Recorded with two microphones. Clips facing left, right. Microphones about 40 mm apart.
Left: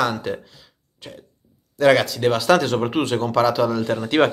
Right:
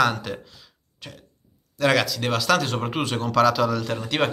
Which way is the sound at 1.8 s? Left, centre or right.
Centre.